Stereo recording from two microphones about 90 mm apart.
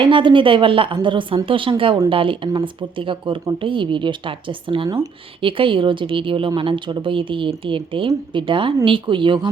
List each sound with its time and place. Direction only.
0.0 s speech: 65° right (ahead or behind)